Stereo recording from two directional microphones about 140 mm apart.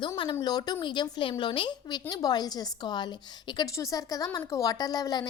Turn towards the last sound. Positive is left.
turn(degrees=30)  # may be behind; listen again after turning